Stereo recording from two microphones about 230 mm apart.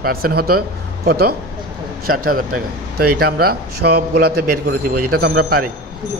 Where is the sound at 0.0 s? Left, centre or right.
Right.